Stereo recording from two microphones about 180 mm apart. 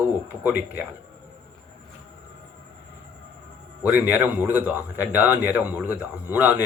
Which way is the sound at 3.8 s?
10° right (ahead or behind).